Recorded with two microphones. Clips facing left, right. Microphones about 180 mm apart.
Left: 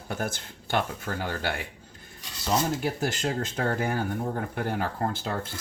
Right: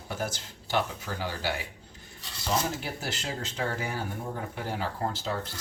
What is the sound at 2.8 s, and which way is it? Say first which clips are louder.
Speech: left 7 dB; 50° left (ahead or behind).